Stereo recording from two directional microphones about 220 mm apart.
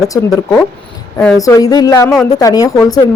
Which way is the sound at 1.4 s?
15° left (ahead or behind).